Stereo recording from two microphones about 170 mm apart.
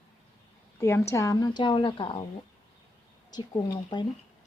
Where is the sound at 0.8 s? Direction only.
15° left (ahead or behind).